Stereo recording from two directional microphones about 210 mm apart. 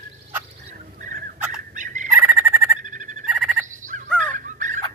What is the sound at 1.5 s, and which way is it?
Turkey, 40° right (ahead or behind).